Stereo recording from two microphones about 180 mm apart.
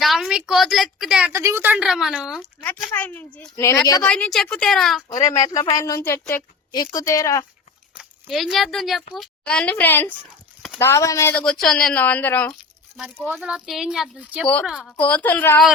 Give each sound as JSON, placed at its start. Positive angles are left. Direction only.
{"t": 0.0, "sound": "a woman's voice", "side_deg": 0}
{"t": 1.3, "sound": "a woman's voice", "side_deg": -15}
{"t": 2.4, "sound": "a woman's voice", "side_deg": 10}
{"t": 4.1, "sound": "a woman's voice", "side_deg": 5}
{"t": 5.5, "sound": "a woman's voice", "side_deg": 25}
{"t": 7.9, "sound": "speech", "side_deg": 0}
{"t": 13.2, "sound": "a woman's voice", "side_deg": -5}